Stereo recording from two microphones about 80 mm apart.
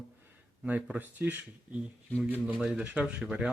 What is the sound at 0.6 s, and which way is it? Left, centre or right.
Speech, centre.